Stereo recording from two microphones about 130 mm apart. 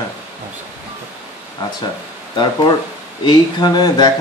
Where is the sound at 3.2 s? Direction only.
35° left (ahead or behind).